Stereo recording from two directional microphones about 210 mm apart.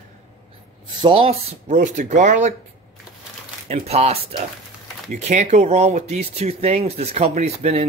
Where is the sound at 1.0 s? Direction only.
25° right (ahead or behind).